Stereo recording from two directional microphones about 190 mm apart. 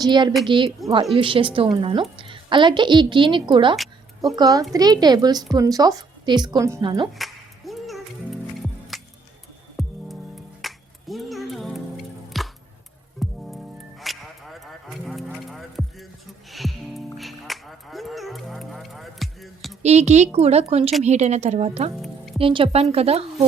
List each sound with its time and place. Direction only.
0.0 s a woman's voice: 20° right (ahead or behind)
7.2 s music: centre (ahead or behind)
14.0 s a sound: centre (ahead or behind)
16.5 s music: centre (ahead or behind)
19.8 s speech: 35° right (ahead or behind)